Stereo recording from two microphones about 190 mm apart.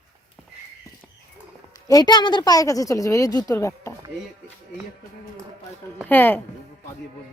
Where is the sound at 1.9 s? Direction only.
20° left (ahead or behind).